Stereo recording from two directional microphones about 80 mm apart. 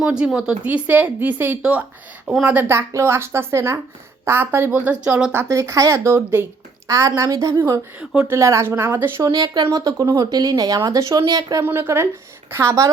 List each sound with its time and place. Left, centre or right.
0.0 s speech: centre
0.6 s a woman's voice: right
2.2 s a woman's voice: centre
2.6 s a woman's voice: right
4.9 s a woman's voice: centre
5.5 s speech: right
6.8 s a woman's voice: right
7.9 s speech: centre
8.3 s speech: right
9.2 s speech: right
11.6 s a woman's voice: right